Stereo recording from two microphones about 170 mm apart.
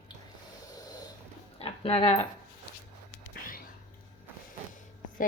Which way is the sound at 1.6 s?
35° left (ahead or behind).